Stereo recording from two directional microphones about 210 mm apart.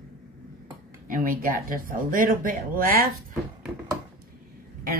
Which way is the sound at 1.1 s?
40° right (ahead or behind).